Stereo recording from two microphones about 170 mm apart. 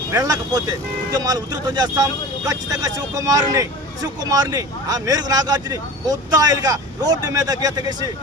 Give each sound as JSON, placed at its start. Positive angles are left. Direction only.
{"t": 0.1, "sound": "speech", "side_deg": -20}